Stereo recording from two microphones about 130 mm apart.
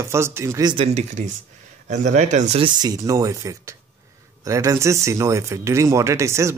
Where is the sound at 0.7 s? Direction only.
55° right (ahead or behind).